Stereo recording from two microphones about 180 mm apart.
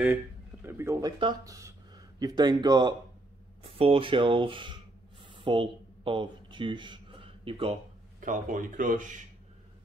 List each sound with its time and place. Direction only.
0.7 s speech: 15° right (ahead or behind)
5.2 s a sound: 25° right (ahead or behind)
8.2 s speech: 45° right (ahead or behind)